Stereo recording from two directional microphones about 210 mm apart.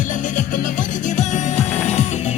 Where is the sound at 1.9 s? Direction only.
30° left (ahead or behind).